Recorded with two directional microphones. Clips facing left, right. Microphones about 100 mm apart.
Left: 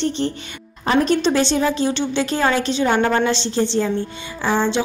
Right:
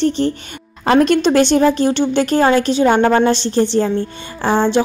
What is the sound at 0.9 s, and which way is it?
A woman's voice, 70° right (ahead or behind).